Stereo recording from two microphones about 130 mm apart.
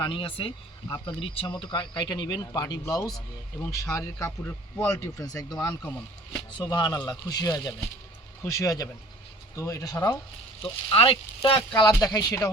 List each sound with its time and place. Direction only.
0.0 s speech: 40° left (ahead or behind)
10.6 s speech: 45° left (ahead or behind)
11.8 s speech: 25° left (ahead or behind)